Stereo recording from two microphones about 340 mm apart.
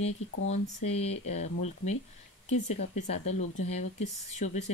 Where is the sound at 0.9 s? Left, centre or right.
Centre.